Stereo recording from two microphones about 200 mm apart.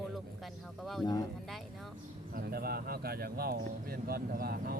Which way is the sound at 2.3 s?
50° right (ahead or behind).